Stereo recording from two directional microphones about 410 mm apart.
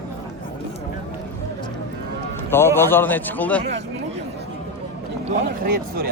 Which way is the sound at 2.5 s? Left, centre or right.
Centre.